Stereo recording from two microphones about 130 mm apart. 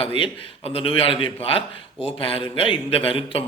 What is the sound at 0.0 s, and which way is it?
A man's voice, 45° left (ahead or behind).